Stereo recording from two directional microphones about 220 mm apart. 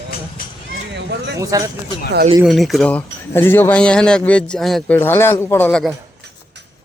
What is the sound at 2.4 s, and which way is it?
Speech, centre (ahead or behind).